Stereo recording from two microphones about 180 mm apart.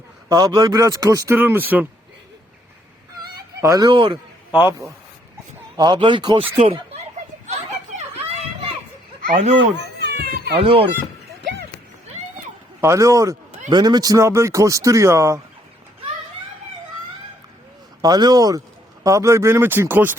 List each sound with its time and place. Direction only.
0.3 s a man's voice: 20° right (ahead or behind)
3.2 s a sound: 20° right (ahead or behind)
5.7 s a man's voice: 25° right (ahead or behind)
7.4 s children playing: 40° right (ahead or behind)
9.2 s speech: 40° right (ahead or behind)
9.6 s children playing: 70° right (ahead or behind)
10.6 s speech: 30° right (ahead or behind)
12.8 s speech: 15° right (ahead or behind)
18.0 s a man's voice: 20° right (ahead or behind)